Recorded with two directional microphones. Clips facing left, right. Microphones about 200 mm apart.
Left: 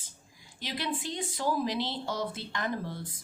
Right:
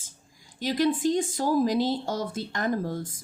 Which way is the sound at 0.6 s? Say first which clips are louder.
Right 11 dB; 45° right (ahead or behind).